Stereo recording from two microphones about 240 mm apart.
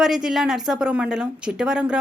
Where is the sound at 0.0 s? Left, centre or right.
Centre.